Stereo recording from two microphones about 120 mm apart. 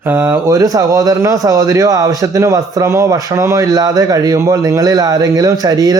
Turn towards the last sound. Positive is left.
turn(degrees=-30)  # may be behind; listen again after turning